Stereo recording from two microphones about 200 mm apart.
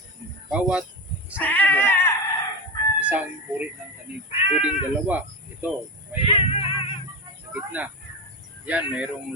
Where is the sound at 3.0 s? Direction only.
5° right (ahead or behind).